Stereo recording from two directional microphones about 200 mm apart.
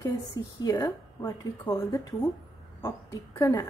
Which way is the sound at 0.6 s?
20° left (ahead or behind).